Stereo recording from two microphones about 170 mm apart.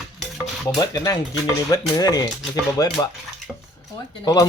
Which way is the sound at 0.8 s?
20° left (ahead or behind).